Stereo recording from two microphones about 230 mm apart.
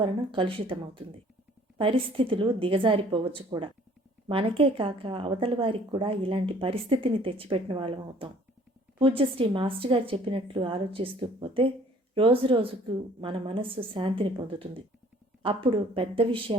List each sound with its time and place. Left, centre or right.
0.0 s a woman's voice: right